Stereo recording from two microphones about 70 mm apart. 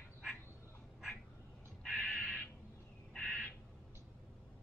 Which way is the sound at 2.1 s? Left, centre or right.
Centre.